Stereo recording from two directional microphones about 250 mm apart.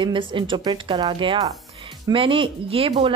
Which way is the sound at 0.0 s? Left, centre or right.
Centre.